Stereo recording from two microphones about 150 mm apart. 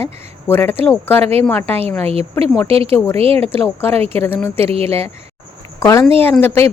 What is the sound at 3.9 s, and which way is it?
Speech, 40° right (ahead or behind).